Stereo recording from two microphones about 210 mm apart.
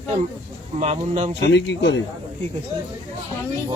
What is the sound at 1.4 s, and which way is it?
Speech, 55° left (ahead or behind).